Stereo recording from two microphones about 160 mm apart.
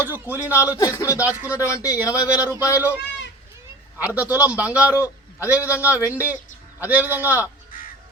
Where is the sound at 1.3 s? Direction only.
10° right (ahead or behind).